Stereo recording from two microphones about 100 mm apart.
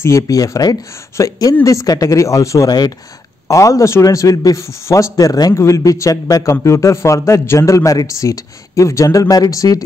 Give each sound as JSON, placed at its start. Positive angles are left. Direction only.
{"t": 0.0, "sound": "a man's voice", "side_deg": 30}